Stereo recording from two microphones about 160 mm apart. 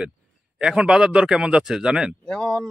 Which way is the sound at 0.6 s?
5° right (ahead or behind).